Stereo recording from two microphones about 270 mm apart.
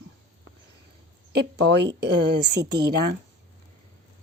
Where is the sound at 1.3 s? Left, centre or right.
Right.